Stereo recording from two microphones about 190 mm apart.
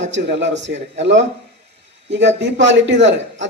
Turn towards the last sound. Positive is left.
turn(degrees=-70)  # may be behind; listen again after turning